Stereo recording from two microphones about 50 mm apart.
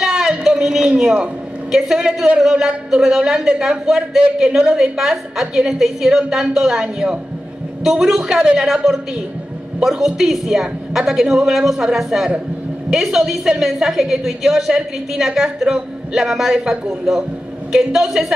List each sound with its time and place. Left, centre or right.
0.0 s a sound: centre
1.8 s a woman's voice: centre
4.5 s a woman's voice: right
4.7 s a woman's voice: centre